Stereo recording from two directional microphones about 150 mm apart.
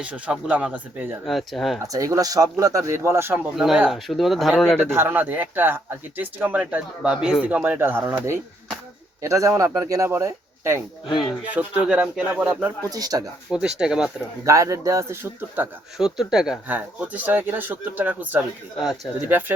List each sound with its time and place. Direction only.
0.0 s speech: 10° right (ahead or behind)
1.2 s speech: centre (ahead or behind)
1.8 s speech: 20° right (ahead or behind)
3.5 s speech: centre (ahead or behind)
4.9 s speech: 15° right (ahead or behind)
11.0 s speech: 30° left (ahead or behind)
11.5 s speech: 10° right (ahead or behind)
12.9 s speech: 25° right (ahead or behind)
13.5 s speech: 5° right (ahead or behind)
14.4 s speech: 20° right (ahead or behind)
16.0 s speech: 5° right (ahead or behind)